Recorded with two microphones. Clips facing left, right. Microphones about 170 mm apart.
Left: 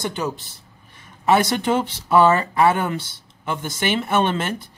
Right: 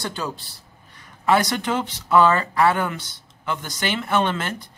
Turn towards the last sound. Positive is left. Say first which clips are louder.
# left 2 dB
turn(degrees=25)  # may be behind; listen again after turning